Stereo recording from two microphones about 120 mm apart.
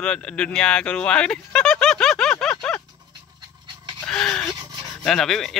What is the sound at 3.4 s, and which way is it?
Pant, 40° right (ahead or behind).